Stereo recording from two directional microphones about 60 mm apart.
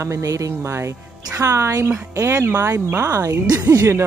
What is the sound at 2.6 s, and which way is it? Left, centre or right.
Speech, right.